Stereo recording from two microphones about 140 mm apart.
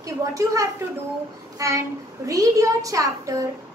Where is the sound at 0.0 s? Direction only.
25° right (ahead or behind).